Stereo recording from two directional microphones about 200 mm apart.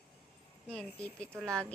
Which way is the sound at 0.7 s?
5° left (ahead or behind).